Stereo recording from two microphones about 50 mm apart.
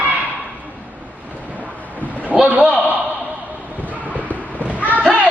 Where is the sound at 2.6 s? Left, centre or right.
Right.